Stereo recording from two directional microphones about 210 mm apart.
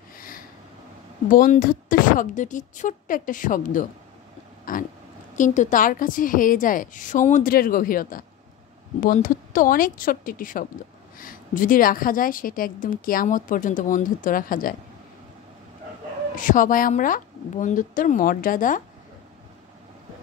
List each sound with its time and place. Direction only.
1.3 s a woman's voice: 40° left (ahead or behind)
16.3 s a woman's voice: 40° left (ahead or behind)